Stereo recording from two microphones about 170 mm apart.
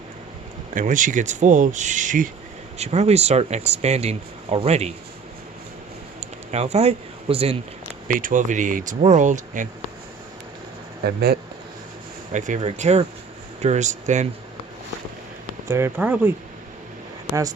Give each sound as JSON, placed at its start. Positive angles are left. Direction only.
{"t": 0.7, "sound": "speech", "side_deg": -50}
{"t": 2.7, "sound": "speech", "side_deg": -40}
{"t": 6.1, "sound": "speech", "side_deg": -40}
{"t": 8.0, "sound": "speech", "side_deg": -50}
{"t": 11.0, "sound": "speech", "side_deg": -70}
{"t": 12.3, "sound": "speech", "side_deg": -45}
{"t": 15.6, "sound": "speech", "side_deg": -15}